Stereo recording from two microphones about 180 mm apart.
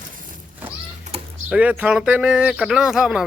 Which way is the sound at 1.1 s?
40° right (ahead or behind).